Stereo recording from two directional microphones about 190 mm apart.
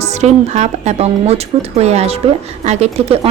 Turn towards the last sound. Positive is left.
turn(degrees=-35)  # may be behind; listen again after turning